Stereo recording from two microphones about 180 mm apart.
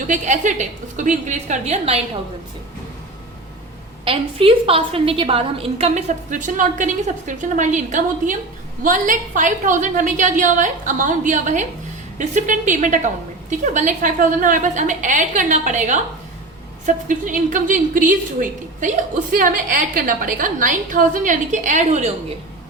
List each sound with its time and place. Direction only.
0.1 s a woman's voice: 45° right (ahead or behind)
4.0 s a woman's voice: 30° right (ahead or behind)